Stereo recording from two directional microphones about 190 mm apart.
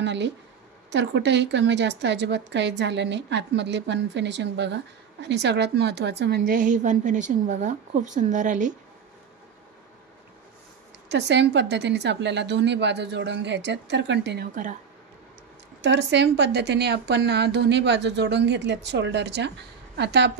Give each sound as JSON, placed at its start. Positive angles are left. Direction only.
{"t": 0.0, "sound": "a woman's voice", "side_deg": -70}
{"t": 11.1, "sound": "a woman's voice", "side_deg": -65}
{"t": 14.5, "sound": "speech", "side_deg": -45}
{"t": 15.8, "sound": "a woman's voice", "side_deg": -65}